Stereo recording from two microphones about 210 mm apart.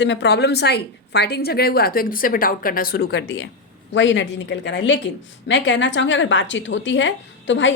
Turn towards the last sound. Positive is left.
turn(degrees=60)  # may be behind; listen again after turning